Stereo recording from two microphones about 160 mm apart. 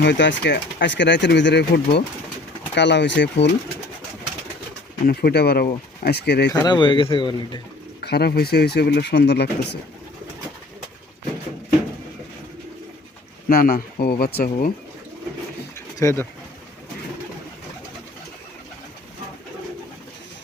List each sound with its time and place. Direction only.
0.0 s speech: 90° left
5.0 s speech: 80° left
6.5 s speech: 25° left (ahead or behind)
8.0 s speech: 85° left
13.5 s speech: 65° left (ahead or behind)
16.0 s speech: 20° left (ahead or behind)